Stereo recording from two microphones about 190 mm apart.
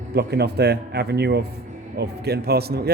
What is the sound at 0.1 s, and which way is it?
A man's voice, 60° right (ahead or behind).